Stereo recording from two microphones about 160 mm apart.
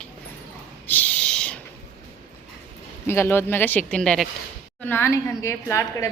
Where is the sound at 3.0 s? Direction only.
15° left (ahead or behind).